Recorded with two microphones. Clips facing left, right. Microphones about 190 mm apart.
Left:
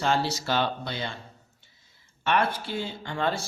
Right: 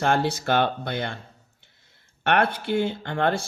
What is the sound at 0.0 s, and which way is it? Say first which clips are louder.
Speech: right 3 dB; 55° right (ahead or behind).